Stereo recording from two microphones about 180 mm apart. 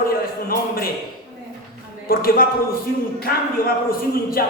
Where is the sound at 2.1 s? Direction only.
55° left (ahead or behind).